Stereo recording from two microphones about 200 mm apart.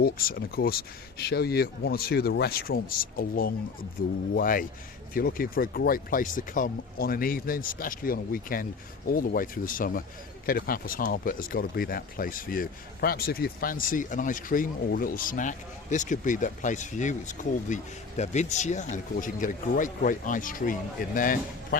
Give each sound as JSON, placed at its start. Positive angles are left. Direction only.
{"t": 0.0, "sound": "speech", "side_deg": 45}